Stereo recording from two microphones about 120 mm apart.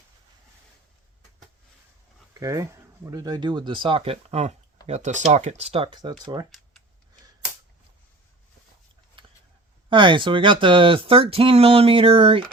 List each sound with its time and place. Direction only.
2.3 s speech: 25° right (ahead or behind); by 4.5 s 65° right (ahead or behind)
4.9 s speech: 75° right (ahead or behind); by 5.9 s 55° right (ahead or behind)
5.9 s speech: 40° right (ahead or behind)
9.9 s speech: 45° right (ahead or behind)